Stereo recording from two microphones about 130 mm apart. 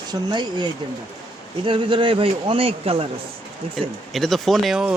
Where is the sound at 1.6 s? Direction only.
40° right (ahead or behind).